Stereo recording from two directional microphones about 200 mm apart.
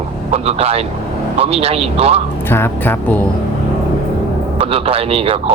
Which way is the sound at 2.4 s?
10° left (ahead or behind).